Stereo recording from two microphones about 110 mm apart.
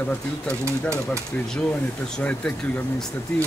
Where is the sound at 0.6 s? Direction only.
25° right (ahead or behind).